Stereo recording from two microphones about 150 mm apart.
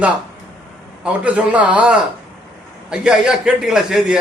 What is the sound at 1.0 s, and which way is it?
A man's voice, 10° right (ahead or behind).